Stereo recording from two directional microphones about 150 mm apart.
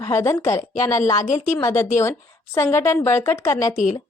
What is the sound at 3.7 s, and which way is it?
Speech, 55° left (ahead or behind).